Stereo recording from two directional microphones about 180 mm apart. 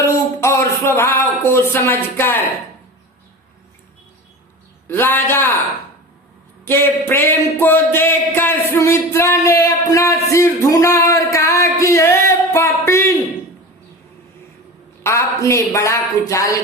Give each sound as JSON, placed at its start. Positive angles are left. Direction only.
{"t": 0.0, "sound": "speech", "side_deg": 15}
{"t": 4.9, "sound": "speech", "side_deg": 10}
{"t": 6.7, "sound": "speech", "side_deg": 15}
{"t": 15.0, "sound": "speech", "side_deg": 15}